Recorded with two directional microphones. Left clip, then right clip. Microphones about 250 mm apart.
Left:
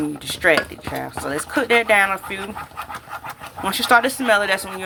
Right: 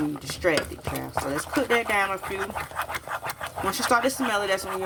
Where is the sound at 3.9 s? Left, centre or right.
Centre.